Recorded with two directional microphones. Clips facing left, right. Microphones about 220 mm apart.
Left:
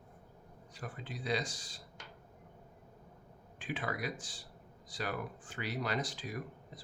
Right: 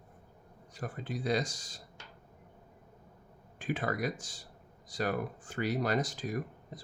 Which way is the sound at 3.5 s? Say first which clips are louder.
Right 5 dB; 45° right (ahead or behind).